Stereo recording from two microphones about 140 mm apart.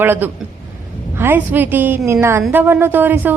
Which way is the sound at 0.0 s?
15° right (ahead or behind).